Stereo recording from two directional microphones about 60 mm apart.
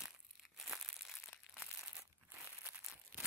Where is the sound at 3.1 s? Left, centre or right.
Centre.